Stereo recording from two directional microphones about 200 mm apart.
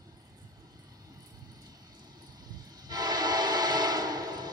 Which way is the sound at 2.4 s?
20° right (ahead or behind).